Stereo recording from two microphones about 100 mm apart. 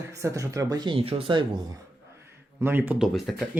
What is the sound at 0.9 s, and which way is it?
Speech, 70° right (ahead or behind).